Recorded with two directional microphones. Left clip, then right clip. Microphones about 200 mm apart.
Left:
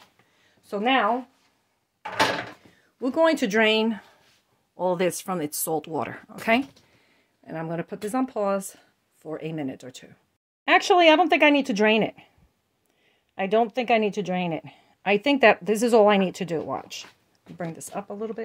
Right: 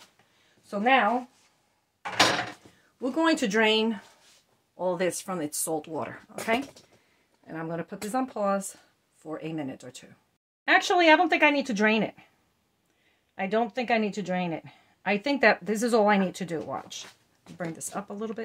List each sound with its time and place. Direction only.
0.7 s speech: 45° left (ahead or behind)
3.0 s speech: 35° left (ahead or behind)
4.7 s speech: 40° left (ahead or behind)
7.4 s speech: 40° left (ahead or behind)
13.3 s speech: 40° left (ahead or behind)
17.6 s speech: 20° left (ahead or behind)